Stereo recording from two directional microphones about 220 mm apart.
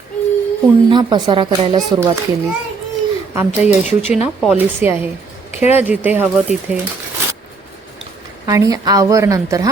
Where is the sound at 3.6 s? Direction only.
Centre (ahead or behind).